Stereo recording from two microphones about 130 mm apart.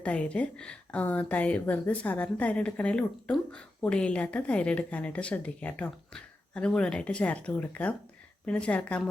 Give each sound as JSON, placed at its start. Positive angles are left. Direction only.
{"t": 0.0, "sound": "speech", "side_deg": 10}